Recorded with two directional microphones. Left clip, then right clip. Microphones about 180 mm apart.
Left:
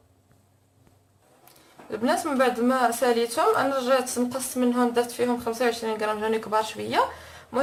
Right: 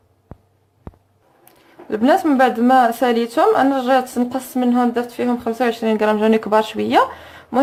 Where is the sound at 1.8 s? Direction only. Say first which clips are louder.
Right 10 dB; 55° right (ahead or behind).